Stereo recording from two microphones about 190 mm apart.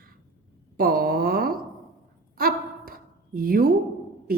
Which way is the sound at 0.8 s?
50° right (ahead or behind).